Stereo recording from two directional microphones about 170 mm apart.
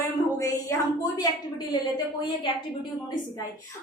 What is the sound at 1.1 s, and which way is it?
Speech, 25° left (ahead or behind).